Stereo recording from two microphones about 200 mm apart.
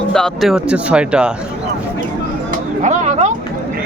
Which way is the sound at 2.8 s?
35° right (ahead or behind).